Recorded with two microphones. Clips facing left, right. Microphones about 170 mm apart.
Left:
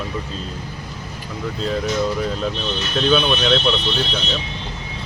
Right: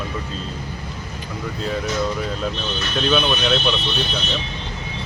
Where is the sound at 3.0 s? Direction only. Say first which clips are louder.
Left 2 dB; centre (ahead or behind).